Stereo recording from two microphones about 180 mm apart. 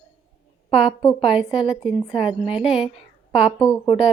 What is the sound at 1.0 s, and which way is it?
Speech, 25° left (ahead or behind).